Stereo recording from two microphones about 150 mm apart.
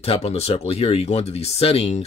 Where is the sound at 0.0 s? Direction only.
40° left (ahead or behind).